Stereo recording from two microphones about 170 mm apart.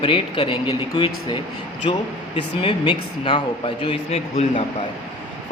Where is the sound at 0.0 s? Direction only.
30° left (ahead or behind).